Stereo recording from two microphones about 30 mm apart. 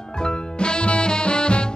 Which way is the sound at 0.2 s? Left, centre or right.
Left.